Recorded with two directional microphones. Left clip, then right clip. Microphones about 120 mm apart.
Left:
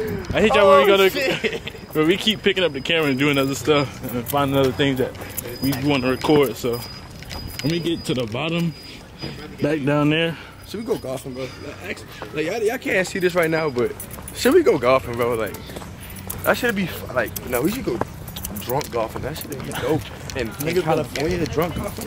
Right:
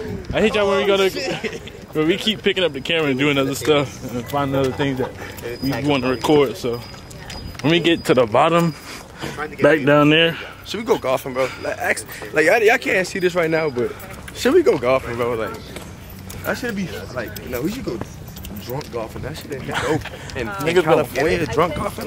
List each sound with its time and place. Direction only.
0.3 s speech: centre (ahead or behind)
7.6 s speech: 25° right (ahead or behind)
8.1 s speech: 30° left (ahead or behind)
9.2 s speech: 25° right (ahead or behind)
11.3 s speech: 30° right (ahead or behind)
12.8 s speech: centre (ahead or behind); by 21.4 s 20° right (ahead or behind)
21.4 s speech: 5° right (ahead or behind)